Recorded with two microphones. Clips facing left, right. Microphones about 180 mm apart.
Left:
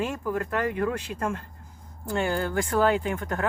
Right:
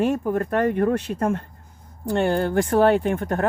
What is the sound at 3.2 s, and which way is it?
Speech, 35° right (ahead or behind).